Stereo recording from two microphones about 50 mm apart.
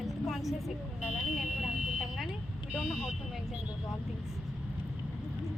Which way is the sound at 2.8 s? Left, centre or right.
Centre.